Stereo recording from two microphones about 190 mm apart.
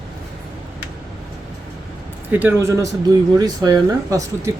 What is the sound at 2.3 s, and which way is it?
Speech, 10° right (ahead or behind).